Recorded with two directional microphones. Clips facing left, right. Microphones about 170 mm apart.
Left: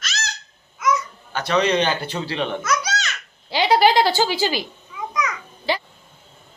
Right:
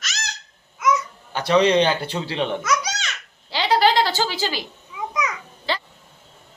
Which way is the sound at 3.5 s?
15° left (ahead or behind).